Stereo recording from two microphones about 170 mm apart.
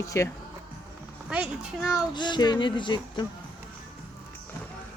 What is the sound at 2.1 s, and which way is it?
Speech, 25° left (ahead or behind).